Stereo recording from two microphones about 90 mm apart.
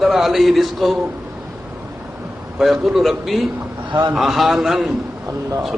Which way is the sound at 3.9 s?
65° right (ahead or behind).